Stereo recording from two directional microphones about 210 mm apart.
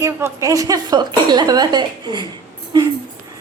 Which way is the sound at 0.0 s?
10° right (ahead or behind).